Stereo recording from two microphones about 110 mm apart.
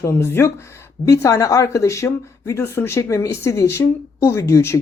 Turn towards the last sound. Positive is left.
turn(degrees=25)  # may be behind; listen again after turning